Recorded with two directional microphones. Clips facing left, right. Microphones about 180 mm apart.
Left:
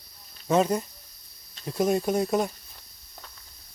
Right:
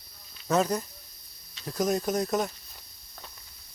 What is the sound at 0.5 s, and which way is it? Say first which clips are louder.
Speech: left 3 dB; centre (ahead or behind).